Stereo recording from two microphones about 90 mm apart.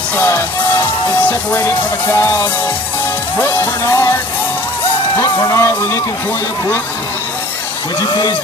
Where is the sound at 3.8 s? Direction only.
30° left (ahead or behind).